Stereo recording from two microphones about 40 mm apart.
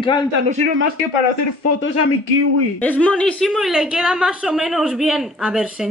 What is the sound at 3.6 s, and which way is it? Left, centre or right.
Speech, centre.